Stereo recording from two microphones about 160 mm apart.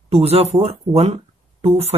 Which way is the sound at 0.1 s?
40° right (ahead or behind).